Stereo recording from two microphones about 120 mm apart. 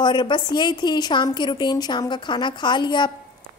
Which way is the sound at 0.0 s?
40° left (ahead or behind).